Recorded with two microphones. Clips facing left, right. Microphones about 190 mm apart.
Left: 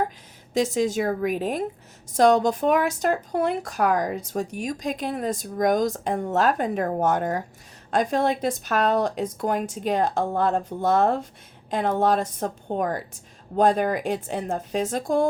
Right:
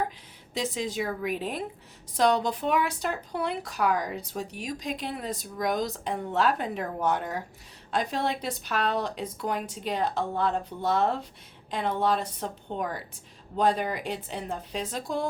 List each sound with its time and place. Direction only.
0.5 s speech: 45° left (ahead or behind)